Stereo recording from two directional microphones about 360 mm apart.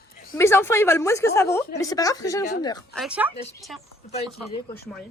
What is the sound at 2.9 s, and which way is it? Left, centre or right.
Speech, centre.